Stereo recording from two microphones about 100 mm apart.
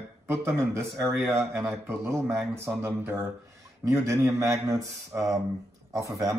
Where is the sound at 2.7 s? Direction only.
25° right (ahead or behind).